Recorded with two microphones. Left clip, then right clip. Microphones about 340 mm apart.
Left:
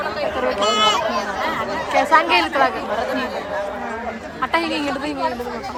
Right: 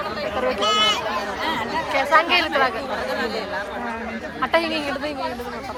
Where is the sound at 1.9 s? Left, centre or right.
Centre.